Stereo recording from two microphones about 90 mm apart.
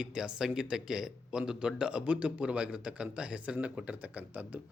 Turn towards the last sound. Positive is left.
turn(degrees=-20)  # may be behind; listen again after turning